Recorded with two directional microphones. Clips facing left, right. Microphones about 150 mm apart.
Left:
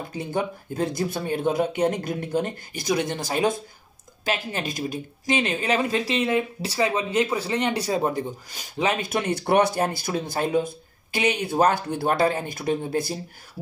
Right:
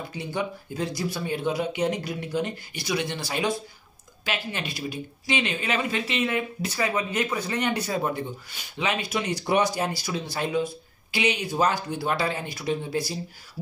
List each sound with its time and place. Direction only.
0.1 s speech: 45° left (ahead or behind)